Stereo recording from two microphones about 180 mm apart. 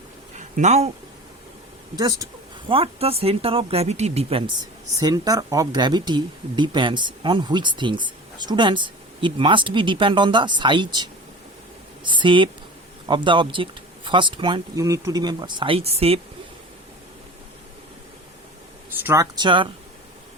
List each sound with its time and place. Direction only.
0.3 s a sound: 40° right (ahead or behind)
2.0 s speech: 20° right (ahead or behind)
4.9 s speech: 20° right (ahead or behind)
19.0 s speech: 15° right (ahead or behind)